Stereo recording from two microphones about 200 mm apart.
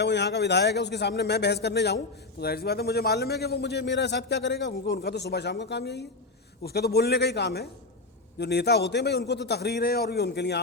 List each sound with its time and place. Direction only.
0.0 s a man's voice: 60° left (ahead or behind)